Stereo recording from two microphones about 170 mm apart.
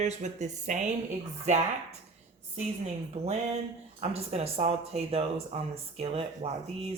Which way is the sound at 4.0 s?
35° right (ahead or behind).